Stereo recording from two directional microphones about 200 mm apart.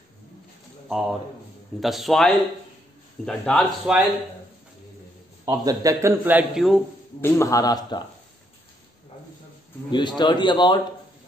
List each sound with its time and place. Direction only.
0.8 s speech: centre (ahead or behind)
5.4 s a man's voice: 20° right (ahead or behind); by 6.8 s centre (ahead or behind)
7.2 s a man's voice: 15° left (ahead or behind)
9.8 s a man's voice: 25° left (ahead or behind)